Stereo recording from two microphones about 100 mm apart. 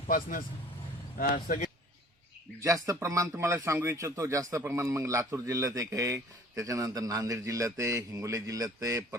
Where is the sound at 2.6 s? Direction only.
35° right (ahead or behind).